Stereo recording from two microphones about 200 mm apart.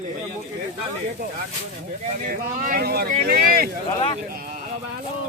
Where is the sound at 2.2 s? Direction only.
45° right (ahead or behind).